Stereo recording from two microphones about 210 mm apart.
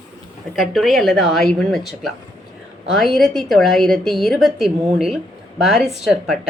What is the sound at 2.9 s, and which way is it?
A woman's voice, centre (ahead or behind).